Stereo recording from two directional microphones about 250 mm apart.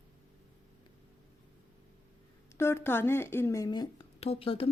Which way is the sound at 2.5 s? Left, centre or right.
Centre.